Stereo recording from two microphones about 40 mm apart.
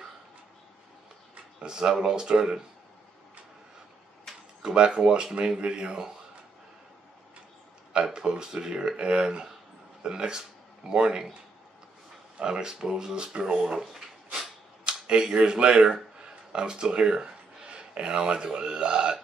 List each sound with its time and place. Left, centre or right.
1.6 s speech: centre
4.6 s speech: right
7.9 s speech: right
12.4 s speech: centre
14.9 s speech: centre